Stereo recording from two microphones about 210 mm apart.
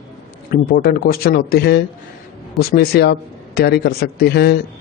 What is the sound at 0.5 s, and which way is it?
A man's voice, 45° left (ahead or behind).